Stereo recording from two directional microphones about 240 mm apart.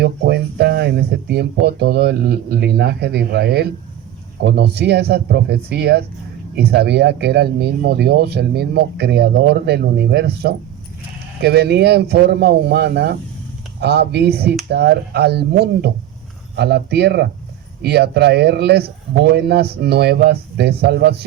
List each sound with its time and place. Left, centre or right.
0.0 s speech: right